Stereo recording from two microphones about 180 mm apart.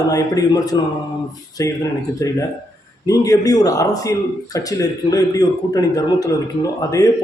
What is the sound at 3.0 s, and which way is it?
Speech, 20° left (ahead or behind).